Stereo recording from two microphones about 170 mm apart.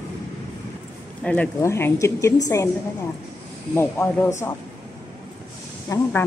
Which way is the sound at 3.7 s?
10° left (ahead or behind).